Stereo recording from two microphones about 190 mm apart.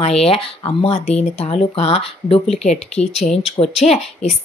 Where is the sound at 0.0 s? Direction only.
30° left (ahead or behind).